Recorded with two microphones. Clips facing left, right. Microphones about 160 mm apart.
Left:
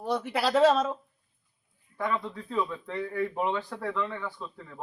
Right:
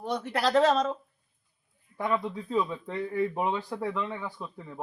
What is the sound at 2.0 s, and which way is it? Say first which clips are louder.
Speech: right 2 dB; 15° right (ahead or behind).